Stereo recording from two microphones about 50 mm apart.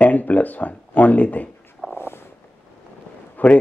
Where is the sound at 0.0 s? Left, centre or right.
Left.